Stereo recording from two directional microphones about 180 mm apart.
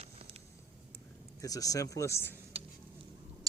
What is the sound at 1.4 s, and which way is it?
Speech, 20° left (ahead or behind).